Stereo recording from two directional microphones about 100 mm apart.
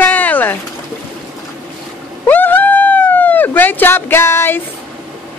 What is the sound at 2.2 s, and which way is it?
Speech, 20° left (ahead or behind).